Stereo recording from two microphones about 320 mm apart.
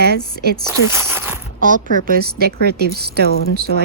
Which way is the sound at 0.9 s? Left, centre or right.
Centre.